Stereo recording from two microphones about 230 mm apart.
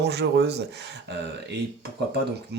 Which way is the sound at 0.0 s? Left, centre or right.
Right.